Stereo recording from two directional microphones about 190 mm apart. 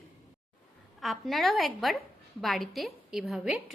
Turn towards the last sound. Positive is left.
turn(degrees=-5)  # may be behind; listen again after turning